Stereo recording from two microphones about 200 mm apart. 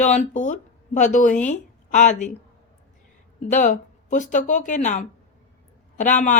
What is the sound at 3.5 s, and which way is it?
A woman's voice, 40° left (ahead or behind).